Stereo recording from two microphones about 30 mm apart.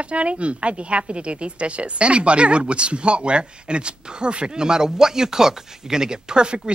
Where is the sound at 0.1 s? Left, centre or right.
Right.